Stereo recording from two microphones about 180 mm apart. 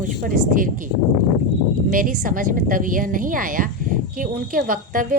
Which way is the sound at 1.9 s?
50° right (ahead or behind).